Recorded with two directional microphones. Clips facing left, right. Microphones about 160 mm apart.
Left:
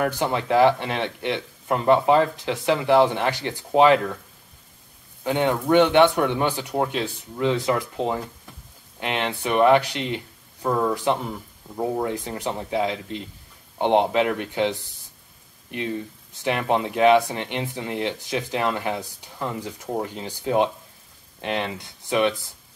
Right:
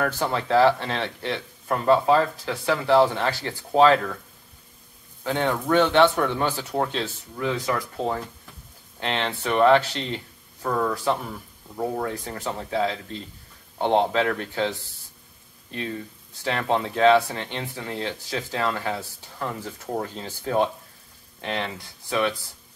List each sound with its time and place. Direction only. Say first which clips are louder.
0.0 s speech: left 2 dB; 20° left (ahead or behind)
5.2 s speech: left 3 dB; 15° left (ahead or behind)
7.3 s speech: left 4 dB; 25° left (ahead or behind)